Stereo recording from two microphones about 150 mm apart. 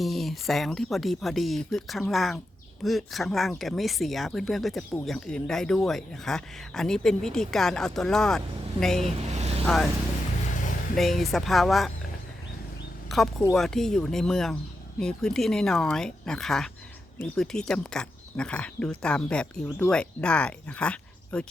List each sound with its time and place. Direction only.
0.0 s speech: centre (ahead or behind)
9.3 s vehicle: 45° right (ahead or behind)
9.6 s speech: centre (ahead or behind)
10.9 s speech: centre (ahead or behind)
13.1 s a sound: centre (ahead or behind)
13.5 s speech: 5° left (ahead or behind)